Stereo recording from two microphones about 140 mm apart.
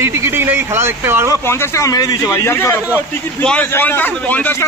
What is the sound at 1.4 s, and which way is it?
A man's voice, 15° left (ahead or behind).